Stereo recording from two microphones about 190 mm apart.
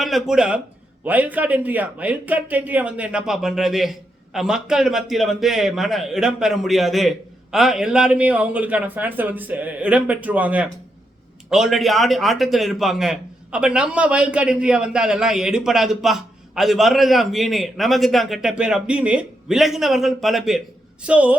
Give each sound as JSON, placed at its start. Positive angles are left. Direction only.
{"t": 0.0, "sound": "a man's voice", "side_deg": 0}